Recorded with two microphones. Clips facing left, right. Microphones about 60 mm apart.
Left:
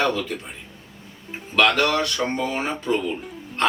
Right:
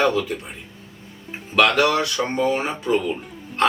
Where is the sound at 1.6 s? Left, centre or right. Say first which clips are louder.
Right 2 dB; centre.